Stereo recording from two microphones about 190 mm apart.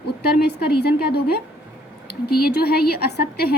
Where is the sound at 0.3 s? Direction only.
55° left (ahead or behind).